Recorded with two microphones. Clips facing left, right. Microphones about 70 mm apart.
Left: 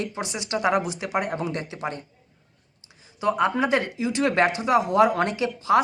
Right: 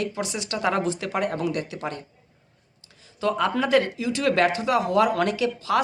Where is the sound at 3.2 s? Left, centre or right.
Left.